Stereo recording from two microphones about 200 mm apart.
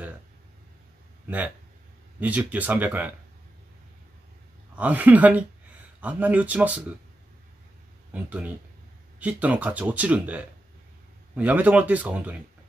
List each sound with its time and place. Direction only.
1.2 s speech: 10° right (ahead or behind)
4.7 s speech: 10° right (ahead or behind)
8.1 s speech: 5° right (ahead or behind)